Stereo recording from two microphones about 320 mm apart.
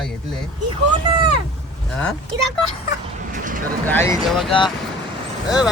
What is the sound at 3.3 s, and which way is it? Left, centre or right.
Vehicle, right.